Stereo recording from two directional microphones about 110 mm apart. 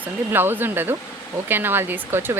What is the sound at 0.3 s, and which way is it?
Speech, 20° right (ahead or behind).